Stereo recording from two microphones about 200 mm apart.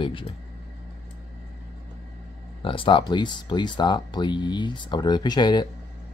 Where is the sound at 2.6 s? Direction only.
25° left (ahead or behind).